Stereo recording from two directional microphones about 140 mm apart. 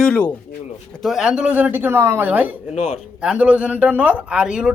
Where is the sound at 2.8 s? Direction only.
55° left (ahead or behind).